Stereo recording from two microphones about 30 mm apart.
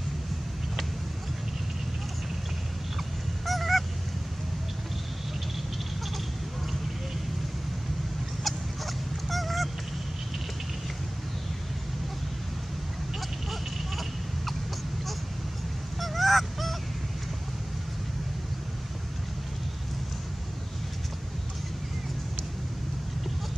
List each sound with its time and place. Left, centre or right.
3.4 s goose: centre
8.5 s goose: centre
13.5 s a sound: centre
16.0 s goose: centre